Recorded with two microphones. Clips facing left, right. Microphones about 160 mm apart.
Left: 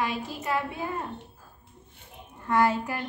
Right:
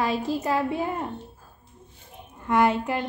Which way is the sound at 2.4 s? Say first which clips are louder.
Right 2 dB; 20° right (ahead or behind).